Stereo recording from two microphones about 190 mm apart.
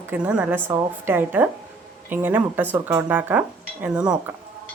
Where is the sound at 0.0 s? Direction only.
10° right (ahead or behind).